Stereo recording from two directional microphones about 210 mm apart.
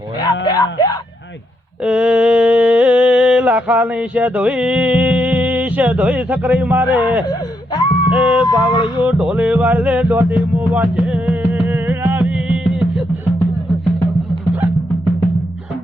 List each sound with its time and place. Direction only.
0.2 s music: 20° left (ahead or behind)
1.8 s mantra: 5° right (ahead or behind)
7.3 s wail: 20° left (ahead or behind)
8.1 s a sound: 5° right (ahead or behind)
8.4 s music: 20° left (ahead or behind)
9.0 s music: 5° right (ahead or behind)